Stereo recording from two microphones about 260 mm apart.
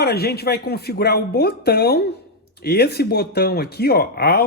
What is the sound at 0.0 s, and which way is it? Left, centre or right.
Speech, left.